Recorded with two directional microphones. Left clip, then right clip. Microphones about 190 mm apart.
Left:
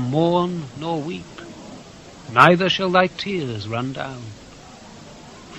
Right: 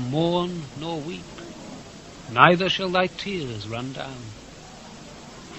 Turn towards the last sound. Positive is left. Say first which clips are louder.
# left 5 dB
turn(degrees=-20)  # may be behind; listen again after turning